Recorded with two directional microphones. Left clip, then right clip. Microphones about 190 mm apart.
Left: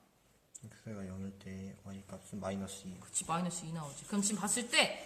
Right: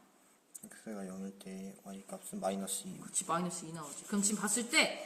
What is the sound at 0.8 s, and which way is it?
Speech, 5° right (ahead or behind).